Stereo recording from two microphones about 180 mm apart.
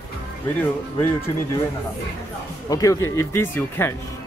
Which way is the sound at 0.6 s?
15° left (ahead or behind).